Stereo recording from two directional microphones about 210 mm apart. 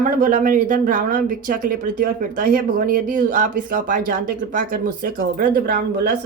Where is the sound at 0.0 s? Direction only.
40° right (ahead or behind).